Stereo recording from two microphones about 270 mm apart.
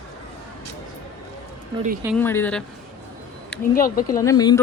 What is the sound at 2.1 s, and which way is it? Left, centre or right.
Speech, centre.